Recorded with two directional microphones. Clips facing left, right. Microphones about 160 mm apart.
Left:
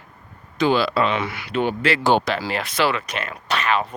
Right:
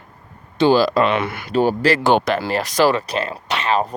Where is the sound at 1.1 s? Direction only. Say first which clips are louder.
Right 4 dB; 55° right (ahead or behind).